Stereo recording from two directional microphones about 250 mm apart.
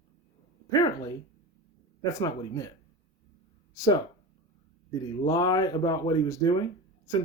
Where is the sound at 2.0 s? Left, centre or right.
Centre.